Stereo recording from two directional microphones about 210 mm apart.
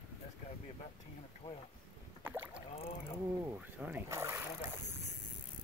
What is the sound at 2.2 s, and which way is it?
Rowboat, 10° right (ahead or behind).